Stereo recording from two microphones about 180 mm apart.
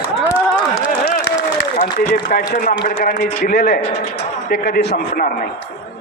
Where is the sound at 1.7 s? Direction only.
45° left (ahead or behind); by 5.2 s 60° left (ahead or behind).